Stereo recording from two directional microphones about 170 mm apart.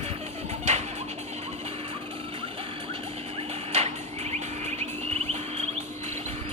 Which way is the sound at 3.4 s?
40° right (ahead or behind).